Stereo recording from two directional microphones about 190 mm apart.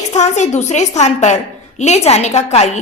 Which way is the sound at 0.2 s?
35° left (ahead or behind).